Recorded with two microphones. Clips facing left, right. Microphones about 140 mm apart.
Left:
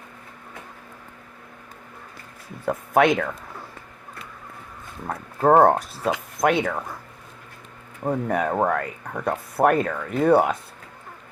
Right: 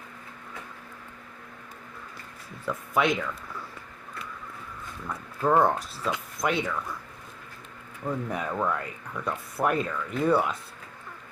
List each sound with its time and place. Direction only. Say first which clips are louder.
2.6 s speech: left 7 dB; 55° left (ahead or behind)
5.0 s speech: left 7 dB; 55° left (ahead or behind)
8.0 s speech: left 7 dB; 55° left (ahead or behind)